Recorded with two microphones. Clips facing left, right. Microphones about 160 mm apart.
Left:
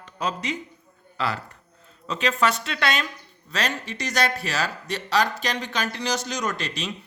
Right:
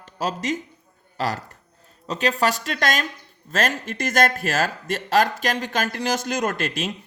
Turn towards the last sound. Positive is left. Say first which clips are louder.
# right 4 dB
turn(degrees=-50)  # may be behind; listen again after turning